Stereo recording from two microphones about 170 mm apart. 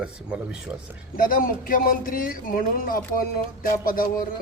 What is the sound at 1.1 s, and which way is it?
Speech, 55° left (ahead or behind).